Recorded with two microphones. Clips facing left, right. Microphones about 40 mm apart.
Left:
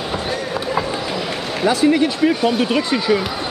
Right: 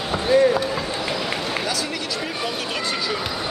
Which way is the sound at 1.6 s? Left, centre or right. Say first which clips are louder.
Left 11 dB; left.